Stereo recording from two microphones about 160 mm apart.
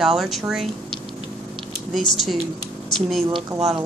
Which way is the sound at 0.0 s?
Centre (ahead or behind).